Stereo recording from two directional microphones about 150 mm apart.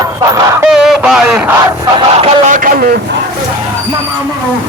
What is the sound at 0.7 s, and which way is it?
Speech, 5° right (ahead or behind).